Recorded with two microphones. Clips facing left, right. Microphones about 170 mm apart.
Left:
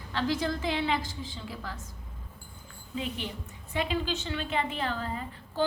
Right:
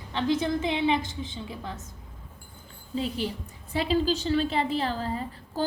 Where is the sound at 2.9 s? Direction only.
35° right (ahead or behind).